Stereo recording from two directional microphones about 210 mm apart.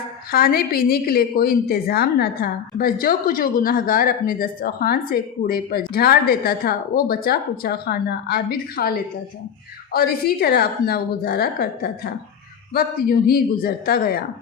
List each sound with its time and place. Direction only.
0.3 s a woman's voice: 45° left (ahead or behind)